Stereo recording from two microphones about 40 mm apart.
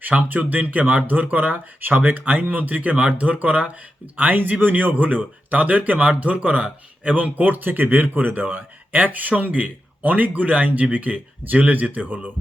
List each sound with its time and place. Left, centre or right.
0.2 s speech: right
4.2 s speech: right